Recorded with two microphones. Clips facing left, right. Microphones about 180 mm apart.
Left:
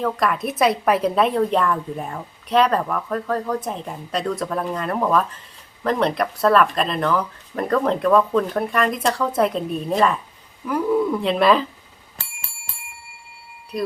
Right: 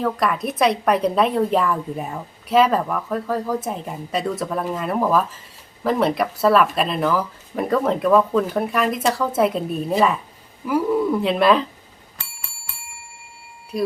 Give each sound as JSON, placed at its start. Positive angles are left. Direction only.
{"t": 0.0, "sound": "a woman's voice", "side_deg": 0}
{"t": 13.7, "sound": "a woman's voice", "side_deg": 0}